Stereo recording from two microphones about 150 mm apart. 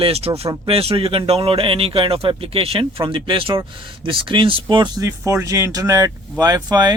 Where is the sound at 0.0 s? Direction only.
40° right (ahead or behind).